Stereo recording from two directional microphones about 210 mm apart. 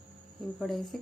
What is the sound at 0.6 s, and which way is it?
Speech, centre (ahead or behind).